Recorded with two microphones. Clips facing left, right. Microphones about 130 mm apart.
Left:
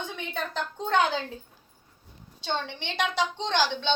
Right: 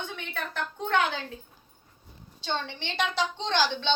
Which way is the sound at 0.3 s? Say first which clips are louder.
Left 2 dB; 20° left (ahead or behind).